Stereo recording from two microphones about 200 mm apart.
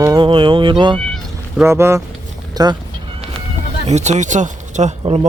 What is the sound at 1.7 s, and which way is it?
Speech, 15° right (ahead or behind).